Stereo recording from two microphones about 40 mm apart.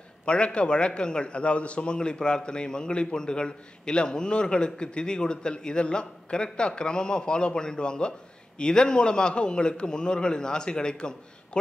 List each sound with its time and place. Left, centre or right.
0.2 s a man's voice: left